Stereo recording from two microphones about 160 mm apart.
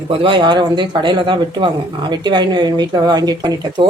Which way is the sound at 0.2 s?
30° right (ahead or behind).